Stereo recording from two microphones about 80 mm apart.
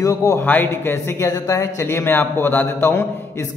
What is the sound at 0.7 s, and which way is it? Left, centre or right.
Speech, left.